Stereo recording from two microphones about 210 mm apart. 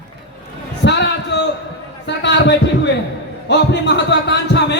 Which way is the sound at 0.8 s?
55° left (ahead or behind).